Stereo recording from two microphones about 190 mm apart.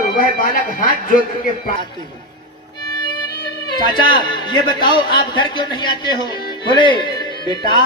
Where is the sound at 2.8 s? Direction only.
20° left (ahead or behind).